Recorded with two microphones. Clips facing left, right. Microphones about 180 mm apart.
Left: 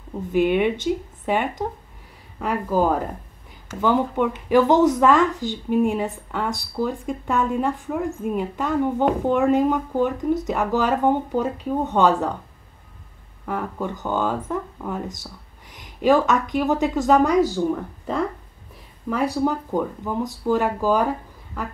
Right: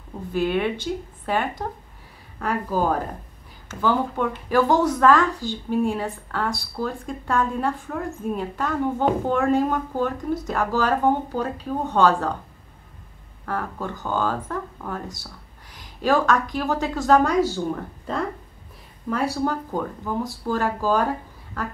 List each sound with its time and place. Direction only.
0.3 s a woman's voice: 15° left (ahead or behind)
13.5 s a woman's voice: 15° left (ahead or behind)
17.6 s a woman's voice: 5° left (ahead or behind)